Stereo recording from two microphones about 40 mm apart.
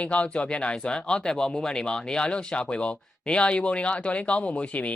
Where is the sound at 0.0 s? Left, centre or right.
Left.